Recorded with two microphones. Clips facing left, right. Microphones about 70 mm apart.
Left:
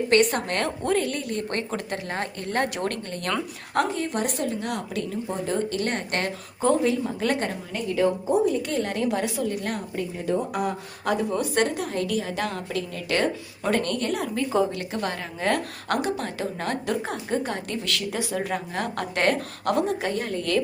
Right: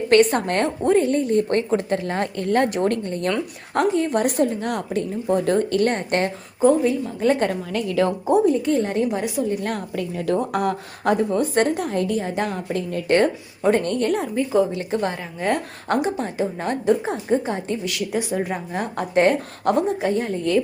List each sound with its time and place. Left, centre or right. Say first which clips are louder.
0.1 s a woman's voice: right 6 dB; right
0.9 s a woman's voice: right 9 dB; right
3.8 s a woman's voice: right 5 dB; right
6.6 s speech: right 5 dB; centre
7.3 s a woman's voice: right 8 dB; right
7.7 s a woman's voice: right 3 dB; right
8.6 s a woman's voice: right 5 dB; right
10.5 s a woman's voice: right 5 dB; right
11.1 s a woman's voice: right 5 dB; right
14.4 s a woman's voice: right 3 dB; centre